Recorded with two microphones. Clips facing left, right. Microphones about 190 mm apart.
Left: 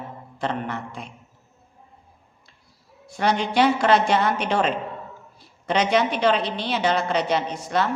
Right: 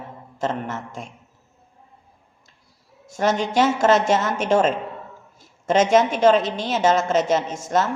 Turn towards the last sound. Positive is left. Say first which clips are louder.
# right 2 dB
turn(degrees=-45)  # may be behind; listen again after turning